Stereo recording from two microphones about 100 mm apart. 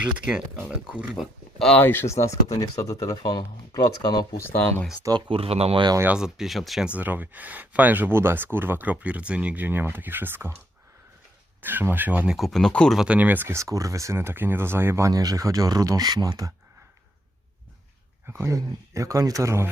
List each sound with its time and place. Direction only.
0.6 s speech: 10° right (ahead or behind)
1.5 s speech: 5° left (ahead or behind)
1.8 s speech: 20° left (ahead or behind); by 4.4 s 45° left (ahead or behind)
4.4 s speech: 20° left (ahead or behind)
5.3 s speech: 80° right
6.1 s speech: 5° right (ahead or behind)
6.8 s speech: 15° right (ahead or behind)
11.6 s speech: 20° right (ahead or behind)
12.4 s speech: 5° left (ahead or behind)
13.0 s speech: 15° right (ahead or behind); by 16.5 s 40° right (ahead or behind)
18.3 s speech: 30° right (ahead or behind)